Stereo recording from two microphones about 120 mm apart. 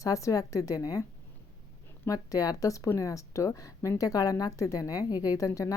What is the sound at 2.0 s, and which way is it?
Speech, 30° left (ahead or behind).